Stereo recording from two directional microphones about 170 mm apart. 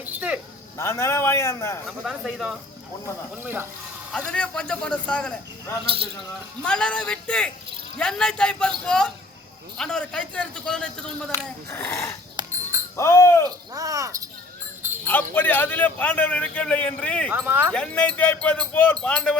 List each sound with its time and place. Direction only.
0.0 s cricket: 10° right (ahead or behind)
0.8 s a man's voice: 15° left (ahead or behind)
1.9 s a man's voice: centre (ahead or behind)
4.3 s a man's voice: 5° left (ahead or behind)
12.4 s a sound: 25° right (ahead or behind)
13.0 s a man's voice: 15° left (ahead or behind)
13.7 s insect: 20° right (ahead or behind)
15.0 s a man's voice: 10° left (ahead or behind)
17.3 s speech: 10° right (ahead or behind)
17.7 s a man's voice: 5° left (ahead or behind)